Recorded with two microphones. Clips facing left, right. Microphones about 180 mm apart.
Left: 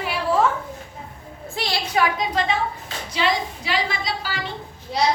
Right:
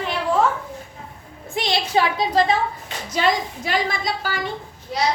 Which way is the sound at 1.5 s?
20° right (ahead or behind).